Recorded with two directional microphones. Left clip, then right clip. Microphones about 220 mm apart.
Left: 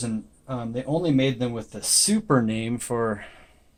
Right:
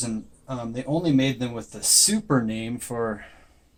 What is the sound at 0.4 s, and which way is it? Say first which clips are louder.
Speech: left 1 dB; 35° left (ahead or behind).